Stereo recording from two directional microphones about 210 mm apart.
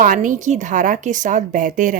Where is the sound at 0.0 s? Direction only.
40° right (ahead or behind).